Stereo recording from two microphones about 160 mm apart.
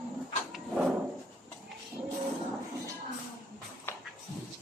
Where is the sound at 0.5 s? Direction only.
5° right (ahead or behind).